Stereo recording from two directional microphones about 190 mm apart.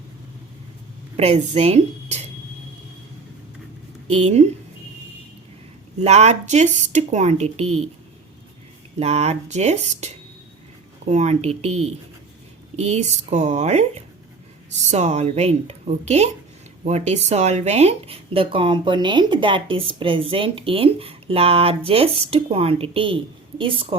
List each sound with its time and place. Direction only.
1.1 s a woman's voice: 35° right (ahead or behind)
4.2 s a woman's voice: 35° right (ahead or behind)
6.0 s a woman's voice: 35° right (ahead or behind)
9.0 s a woman's voice: 35° right (ahead or behind)
11.1 s a woman's voice: 35° right (ahead or behind)